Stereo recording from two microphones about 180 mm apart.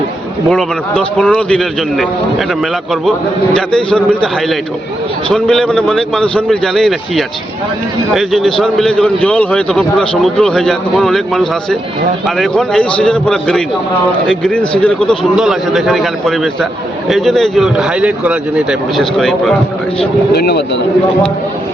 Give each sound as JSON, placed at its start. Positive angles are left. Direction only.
{"t": 0.5, "sound": "a man's voice", "side_deg": 5}
{"t": 3.5, "sound": "a man's voice", "side_deg": 5}
{"t": 20.3, "sound": "speech", "side_deg": 65}